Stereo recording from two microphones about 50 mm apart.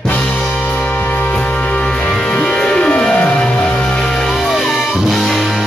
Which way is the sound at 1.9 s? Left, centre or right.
Centre.